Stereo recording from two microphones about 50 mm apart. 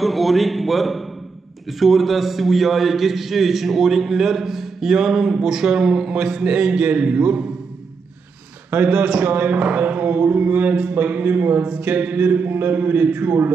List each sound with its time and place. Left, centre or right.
0.0 s a man's voice: centre; by 7.4 s right
8.8 s a man's voice: right
9.3 s a man's voice: right